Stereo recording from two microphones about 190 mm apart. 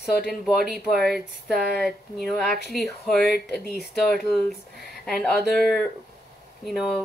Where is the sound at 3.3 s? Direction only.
55° left (ahead or behind).